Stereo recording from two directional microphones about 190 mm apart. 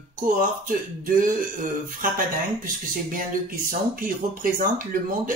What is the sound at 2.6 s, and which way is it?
Speech, 45° right (ahead or behind).